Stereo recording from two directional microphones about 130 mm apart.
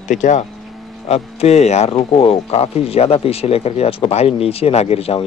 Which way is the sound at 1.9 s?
45° left (ahead or behind).